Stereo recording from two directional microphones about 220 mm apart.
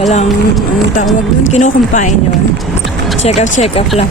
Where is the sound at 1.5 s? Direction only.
35° left (ahead or behind).